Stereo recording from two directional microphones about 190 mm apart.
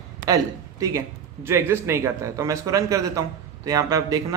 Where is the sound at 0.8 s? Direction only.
15° right (ahead or behind).